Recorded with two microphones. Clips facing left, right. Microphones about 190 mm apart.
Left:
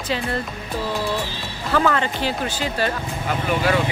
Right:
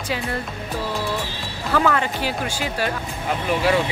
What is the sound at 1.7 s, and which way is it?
Speech, 5° right (ahead or behind).